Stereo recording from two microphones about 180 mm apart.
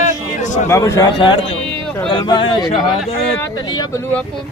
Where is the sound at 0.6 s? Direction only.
15° left (ahead or behind).